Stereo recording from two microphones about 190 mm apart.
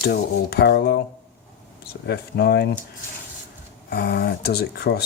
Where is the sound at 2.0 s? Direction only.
60° left (ahead or behind).